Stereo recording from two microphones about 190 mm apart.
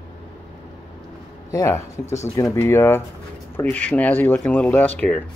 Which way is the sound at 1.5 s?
15° left (ahead or behind).